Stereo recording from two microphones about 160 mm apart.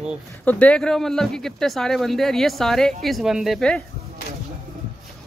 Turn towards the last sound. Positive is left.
turn(degrees=5)  # may be behind; listen again after turning